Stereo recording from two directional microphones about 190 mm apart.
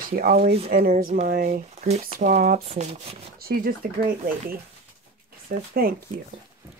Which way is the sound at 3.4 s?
50° right (ahead or behind).